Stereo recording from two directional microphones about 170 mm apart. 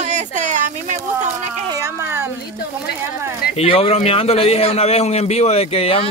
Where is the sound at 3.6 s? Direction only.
35° left (ahead or behind).